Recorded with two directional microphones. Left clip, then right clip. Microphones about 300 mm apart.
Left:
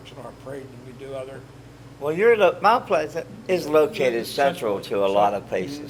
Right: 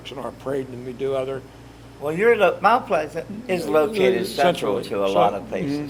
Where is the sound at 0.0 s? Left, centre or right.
Right.